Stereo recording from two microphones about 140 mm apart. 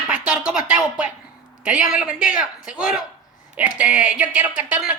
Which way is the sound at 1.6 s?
5° right (ahead or behind).